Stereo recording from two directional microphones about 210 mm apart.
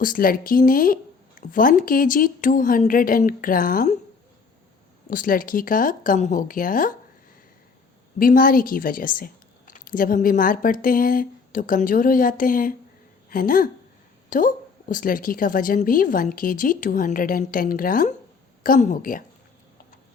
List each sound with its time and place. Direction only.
0.0 s a woman's voice: 40° left (ahead or behind)
5.1 s a woman's voice: 40° left (ahead or behind)
8.2 s a woman's voice: 40° left (ahead or behind)